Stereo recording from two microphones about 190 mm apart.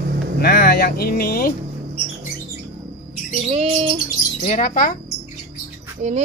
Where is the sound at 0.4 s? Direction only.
55° left (ahead or behind).